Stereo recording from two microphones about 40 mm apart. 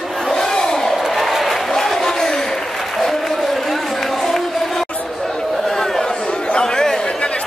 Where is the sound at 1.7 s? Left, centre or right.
Centre.